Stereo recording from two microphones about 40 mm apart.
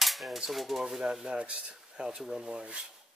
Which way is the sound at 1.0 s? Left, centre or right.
Centre.